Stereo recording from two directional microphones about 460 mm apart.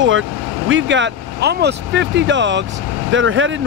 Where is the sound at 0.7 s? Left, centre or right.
Right.